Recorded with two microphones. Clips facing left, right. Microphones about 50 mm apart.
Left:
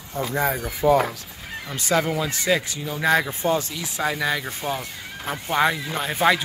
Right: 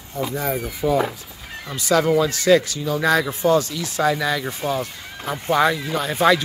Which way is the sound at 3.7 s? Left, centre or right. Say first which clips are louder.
Right 5 dB; centre.